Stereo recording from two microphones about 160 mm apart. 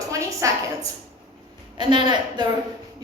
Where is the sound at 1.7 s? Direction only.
30° right (ahead or behind).